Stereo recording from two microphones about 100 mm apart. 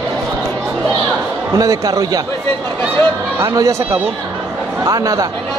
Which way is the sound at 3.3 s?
30° right (ahead or behind).